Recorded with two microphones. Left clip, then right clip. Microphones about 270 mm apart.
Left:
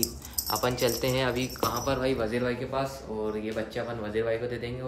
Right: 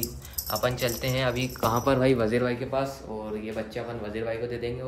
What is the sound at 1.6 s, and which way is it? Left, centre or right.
Speech, centre.